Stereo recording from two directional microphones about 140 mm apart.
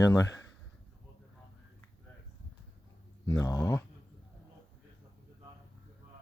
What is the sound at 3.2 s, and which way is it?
Speech, 25° left (ahead or behind).